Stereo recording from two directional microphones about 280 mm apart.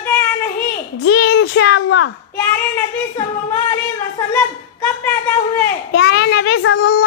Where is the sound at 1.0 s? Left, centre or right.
Left.